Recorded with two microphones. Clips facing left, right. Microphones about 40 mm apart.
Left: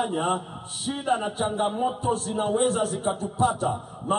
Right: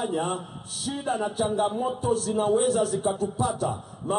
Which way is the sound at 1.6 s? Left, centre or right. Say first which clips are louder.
Left 4 dB; left.